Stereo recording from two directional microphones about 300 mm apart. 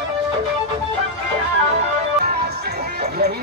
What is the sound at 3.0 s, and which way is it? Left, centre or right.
Music, right.